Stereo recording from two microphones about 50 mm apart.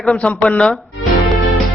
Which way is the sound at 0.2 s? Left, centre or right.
Left.